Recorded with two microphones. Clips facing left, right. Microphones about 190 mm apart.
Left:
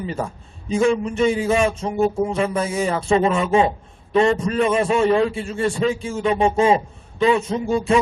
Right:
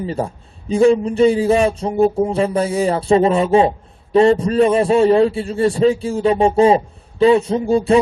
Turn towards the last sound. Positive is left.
turn(degrees=-35)  # may be behind; listen again after turning